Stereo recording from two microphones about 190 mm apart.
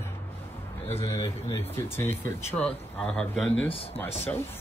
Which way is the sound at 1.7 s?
15° left (ahead or behind).